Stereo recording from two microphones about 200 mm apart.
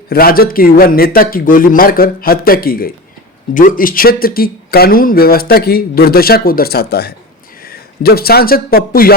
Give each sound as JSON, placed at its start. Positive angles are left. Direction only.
{"t": 0.1, "sound": "speech", "side_deg": 50}